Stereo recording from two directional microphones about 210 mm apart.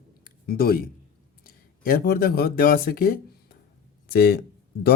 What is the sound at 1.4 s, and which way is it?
Speech, 45° left (ahead or behind).